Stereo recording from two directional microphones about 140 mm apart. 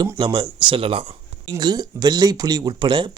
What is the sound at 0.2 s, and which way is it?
Speech, 30° right (ahead or behind).